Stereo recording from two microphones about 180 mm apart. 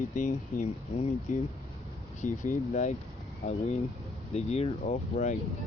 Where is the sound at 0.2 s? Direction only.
45° left (ahead or behind).